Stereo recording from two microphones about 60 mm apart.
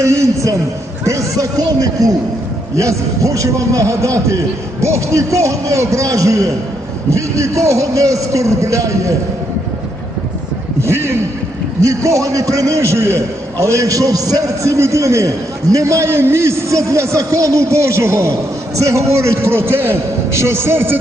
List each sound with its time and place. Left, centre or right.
0.0 s a man's voice: right
2.7 s a man's voice: right
10.8 s a sound: right
11.8 s a man's voice: right